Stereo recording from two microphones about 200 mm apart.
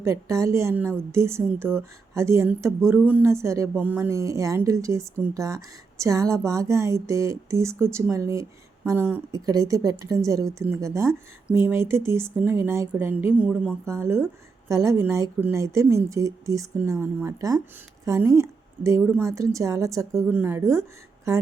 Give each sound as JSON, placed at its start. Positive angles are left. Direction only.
{"t": 0.0, "sound": "speech", "side_deg": -15}